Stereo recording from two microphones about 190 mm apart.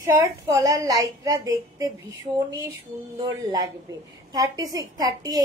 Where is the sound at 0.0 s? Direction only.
15° right (ahead or behind).